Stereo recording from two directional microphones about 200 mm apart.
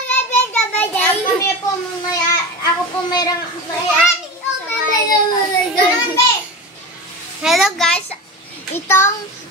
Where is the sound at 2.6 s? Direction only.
20° left (ahead or behind).